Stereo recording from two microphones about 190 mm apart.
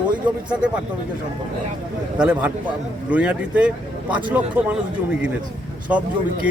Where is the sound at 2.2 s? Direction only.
5° right (ahead or behind).